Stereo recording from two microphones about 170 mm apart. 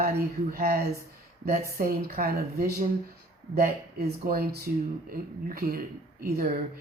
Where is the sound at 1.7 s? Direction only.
65° right (ahead or behind).